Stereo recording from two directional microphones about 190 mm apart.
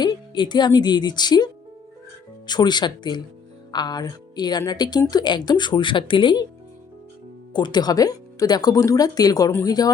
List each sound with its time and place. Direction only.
0.0 s speech: 20° left (ahead or behind)
2.5 s speech: 20° left (ahead or behind)
7.5 s speech: 20° left (ahead or behind)